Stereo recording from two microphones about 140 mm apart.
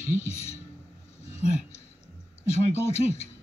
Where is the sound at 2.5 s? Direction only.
50° left (ahead or behind).